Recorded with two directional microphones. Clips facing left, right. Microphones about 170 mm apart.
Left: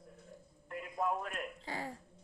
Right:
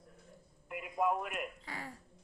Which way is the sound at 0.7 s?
10° right (ahead or behind).